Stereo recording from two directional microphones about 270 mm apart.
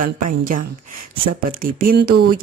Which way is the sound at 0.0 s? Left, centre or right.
Right.